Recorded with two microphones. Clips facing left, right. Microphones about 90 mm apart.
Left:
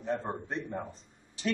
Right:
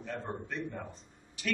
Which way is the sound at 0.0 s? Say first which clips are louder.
Left 5 dB; 30° left (ahead or behind).